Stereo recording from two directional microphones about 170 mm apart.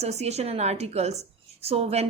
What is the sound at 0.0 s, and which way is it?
A woman's voice, 40° right (ahead or behind).